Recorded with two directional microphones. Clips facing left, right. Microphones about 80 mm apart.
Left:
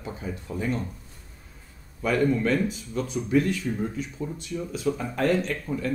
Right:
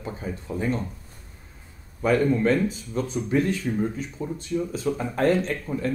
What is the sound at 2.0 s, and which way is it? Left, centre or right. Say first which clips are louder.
Speech: right 2 dB; right.